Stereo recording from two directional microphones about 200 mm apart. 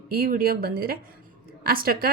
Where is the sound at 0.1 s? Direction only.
45° right (ahead or behind).